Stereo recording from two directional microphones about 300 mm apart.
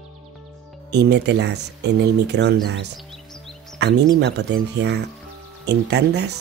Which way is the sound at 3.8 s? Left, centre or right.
Right.